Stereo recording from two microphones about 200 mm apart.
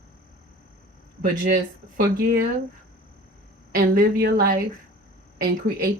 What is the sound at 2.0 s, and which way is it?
Speech, 50° right (ahead or behind).